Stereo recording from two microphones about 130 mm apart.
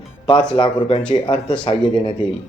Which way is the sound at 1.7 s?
50° left (ahead or behind).